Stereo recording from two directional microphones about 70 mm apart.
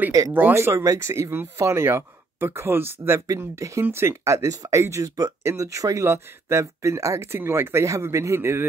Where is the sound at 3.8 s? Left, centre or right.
Right.